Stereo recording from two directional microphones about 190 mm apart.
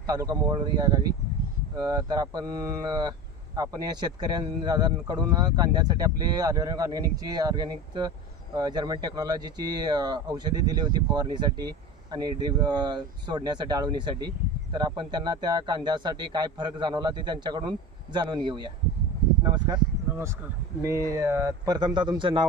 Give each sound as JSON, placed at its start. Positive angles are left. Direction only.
{"t": 0.0, "sound": "speech", "side_deg": -20}
{"t": 20.8, "sound": "a man's voice", "side_deg": -15}